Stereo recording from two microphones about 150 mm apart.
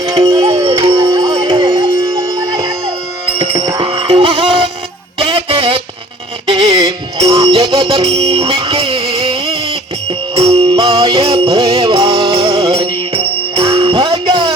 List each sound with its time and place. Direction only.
0.5 s music: 40° right (ahead or behind)
1.0 s music: 25° right (ahead or behind)
2.0 s music: 20° right (ahead or behind)
3.4 s music: 40° right (ahead or behind)
5.2 s a sound: 35° right (ahead or behind)
6.5 s music: 40° right (ahead or behind)